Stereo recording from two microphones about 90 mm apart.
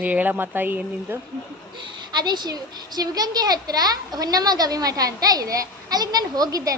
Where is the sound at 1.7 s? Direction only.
60° right (ahead or behind).